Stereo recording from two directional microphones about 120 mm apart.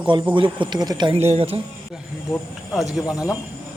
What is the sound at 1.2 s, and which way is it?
Speech, 60° right (ahead or behind).